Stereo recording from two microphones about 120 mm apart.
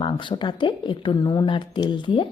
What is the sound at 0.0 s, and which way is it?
Speech, 40° left (ahead or behind).